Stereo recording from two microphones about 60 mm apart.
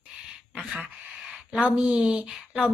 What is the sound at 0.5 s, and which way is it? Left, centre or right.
A woman's voice, centre.